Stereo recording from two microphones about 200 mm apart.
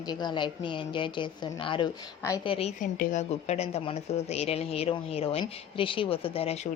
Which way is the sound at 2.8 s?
40° left (ahead or behind).